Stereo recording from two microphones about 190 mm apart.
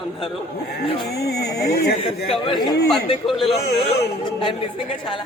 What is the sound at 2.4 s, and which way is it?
Speech, 25° left (ahead or behind).